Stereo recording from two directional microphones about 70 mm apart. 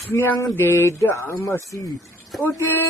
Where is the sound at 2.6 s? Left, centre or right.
Left.